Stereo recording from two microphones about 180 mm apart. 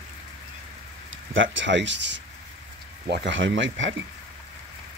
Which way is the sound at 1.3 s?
90° right.